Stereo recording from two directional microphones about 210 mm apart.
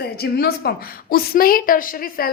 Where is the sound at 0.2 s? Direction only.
45° left (ahead or behind).